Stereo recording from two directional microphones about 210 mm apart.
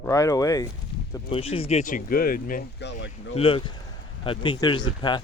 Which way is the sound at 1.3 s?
25° left (ahead or behind).